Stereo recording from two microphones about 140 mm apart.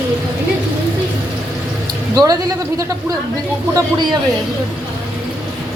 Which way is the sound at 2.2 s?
25° right (ahead or behind).